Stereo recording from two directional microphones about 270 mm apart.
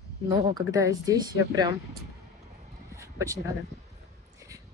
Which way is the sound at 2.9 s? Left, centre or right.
Centre.